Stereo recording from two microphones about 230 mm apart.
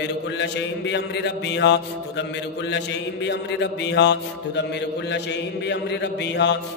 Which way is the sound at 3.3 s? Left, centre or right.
Left.